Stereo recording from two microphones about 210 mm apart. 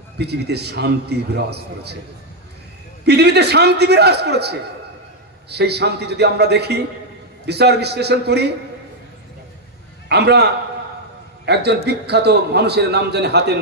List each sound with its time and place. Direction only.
0.2 s a man's voice: 50° right (ahead or behind)
3.1 s a man's voice: 50° right (ahead or behind)
10.0 s a man's voice: 50° right (ahead or behind)